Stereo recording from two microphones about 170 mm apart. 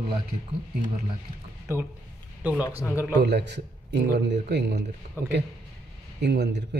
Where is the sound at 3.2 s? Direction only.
85° right.